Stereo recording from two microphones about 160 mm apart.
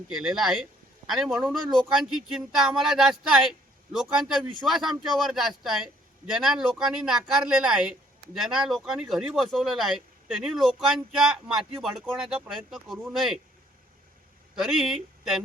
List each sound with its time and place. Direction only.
0.1 s speech: centre (ahead or behind)
14.5 s speech: centre (ahead or behind)